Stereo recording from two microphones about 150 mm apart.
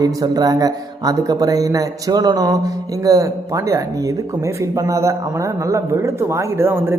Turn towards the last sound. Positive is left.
turn(degrees=-15)  # may be behind; listen again after turning